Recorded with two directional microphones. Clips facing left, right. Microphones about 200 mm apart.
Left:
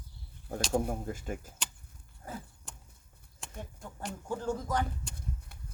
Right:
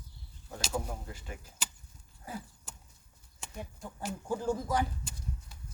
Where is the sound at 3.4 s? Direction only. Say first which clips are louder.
Right 1 dB; 5° right (ahead or behind).